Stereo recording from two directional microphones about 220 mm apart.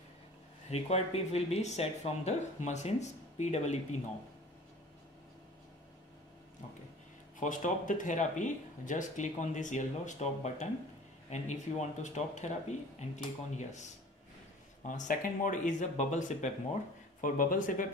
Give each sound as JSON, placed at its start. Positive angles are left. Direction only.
{"t": 0.7, "sound": "speech", "side_deg": 30}
{"t": 7.3, "sound": "speech", "side_deg": 35}